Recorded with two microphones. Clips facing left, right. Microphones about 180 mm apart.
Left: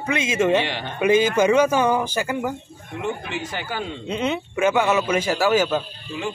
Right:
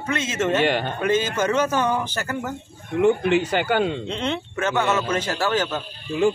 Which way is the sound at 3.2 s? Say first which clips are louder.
Right 10 dB; 65° right (ahead or behind).